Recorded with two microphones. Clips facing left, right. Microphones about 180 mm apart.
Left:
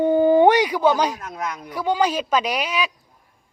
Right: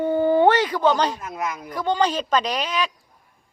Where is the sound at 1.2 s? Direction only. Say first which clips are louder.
Right 1 dB; centre (ahead or behind).